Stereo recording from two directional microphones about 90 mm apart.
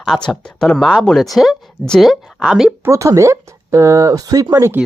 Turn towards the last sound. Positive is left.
turn(degrees=-25)  # may be behind; listen again after turning